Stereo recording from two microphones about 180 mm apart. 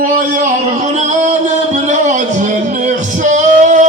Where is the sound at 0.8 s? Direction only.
40° right (ahead or behind).